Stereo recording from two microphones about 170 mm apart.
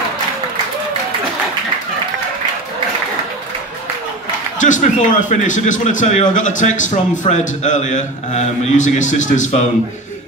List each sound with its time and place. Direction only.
4.6 s a man's voice: 45° left (ahead or behind)